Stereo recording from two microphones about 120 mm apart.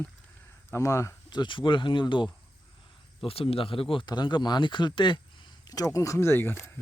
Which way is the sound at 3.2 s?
50° left (ahead or behind).